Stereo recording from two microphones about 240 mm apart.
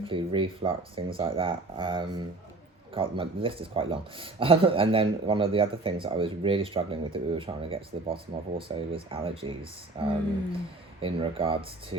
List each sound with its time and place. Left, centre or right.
0.0 s a man's voice: right